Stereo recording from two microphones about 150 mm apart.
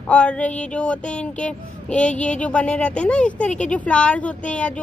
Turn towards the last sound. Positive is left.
turn(degrees=10)  # may be behind; listen again after turning